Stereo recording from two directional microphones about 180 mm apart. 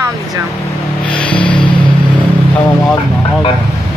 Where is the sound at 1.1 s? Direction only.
5° left (ahead or behind).